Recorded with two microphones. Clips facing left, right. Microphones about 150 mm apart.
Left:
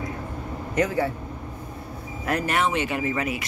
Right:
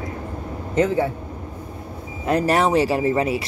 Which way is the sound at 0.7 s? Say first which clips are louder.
Right 4 dB; 25° right (ahead or behind).